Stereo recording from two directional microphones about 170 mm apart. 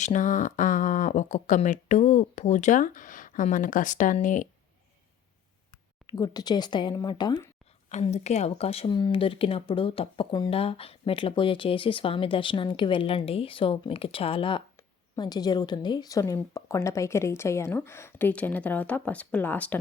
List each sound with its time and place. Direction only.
0.0 s speech: 45° left (ahead or behind)
6.1 s speech: 25° left (ahead or behind)
7.9 s a woman's voice: 40° left (ahead or behind); by 19.8 s 10° left (ahead or behind)